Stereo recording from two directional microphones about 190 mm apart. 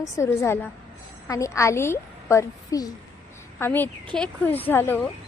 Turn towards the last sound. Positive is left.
turn(degrees=10)  # may be behind; listen again after turning